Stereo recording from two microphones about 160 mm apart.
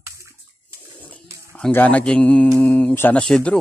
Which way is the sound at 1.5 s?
10° left (ahead or behind).